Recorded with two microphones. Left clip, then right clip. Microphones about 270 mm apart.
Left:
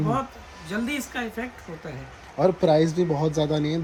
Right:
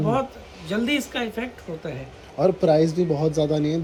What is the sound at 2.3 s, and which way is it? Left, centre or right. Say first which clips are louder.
Speech: right 1 dB; left.